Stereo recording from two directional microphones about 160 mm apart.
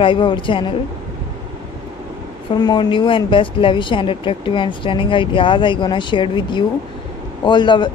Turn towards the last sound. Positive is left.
turn(degrees=30)  # may be behind; listen again after turning